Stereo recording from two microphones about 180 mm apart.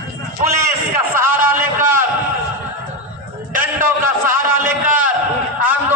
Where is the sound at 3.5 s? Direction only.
50° right (ahead or behind).